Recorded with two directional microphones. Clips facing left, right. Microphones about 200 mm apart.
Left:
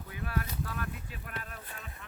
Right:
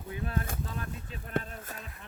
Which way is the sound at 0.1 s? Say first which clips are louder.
Right 3 dB; 25° right (ahead or behind).